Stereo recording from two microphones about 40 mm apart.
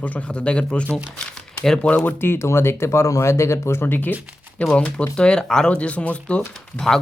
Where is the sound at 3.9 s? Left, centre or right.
Left.